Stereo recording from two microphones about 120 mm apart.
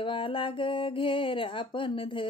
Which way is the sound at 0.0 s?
45° left (ahead or behind).